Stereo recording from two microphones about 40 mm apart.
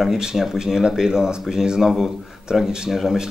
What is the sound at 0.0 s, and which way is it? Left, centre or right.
Speech, centre.